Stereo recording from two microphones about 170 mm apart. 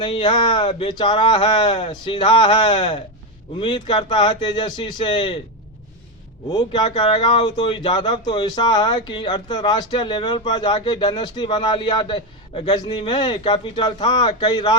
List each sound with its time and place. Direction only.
0.0 s speech: 30° left (ahead or behind)
6.5 s speech: 25° left (ahead or behind)